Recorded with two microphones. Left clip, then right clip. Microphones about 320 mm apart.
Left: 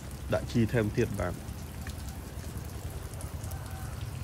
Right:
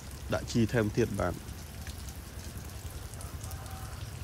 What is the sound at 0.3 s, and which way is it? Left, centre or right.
Speech, centre.